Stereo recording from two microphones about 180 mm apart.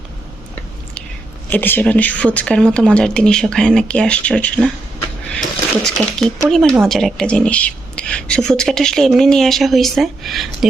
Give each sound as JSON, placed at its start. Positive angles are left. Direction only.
{"t": 1.5, "sound": "a woman's voice", "side_deg": 10}